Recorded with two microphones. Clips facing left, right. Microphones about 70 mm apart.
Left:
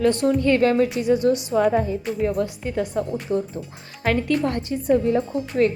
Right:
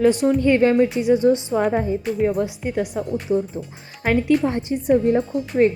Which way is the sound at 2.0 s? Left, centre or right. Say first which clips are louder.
Right 3 dB; centre.